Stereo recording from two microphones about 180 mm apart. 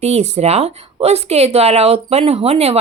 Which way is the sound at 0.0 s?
35° right (ahead or behind).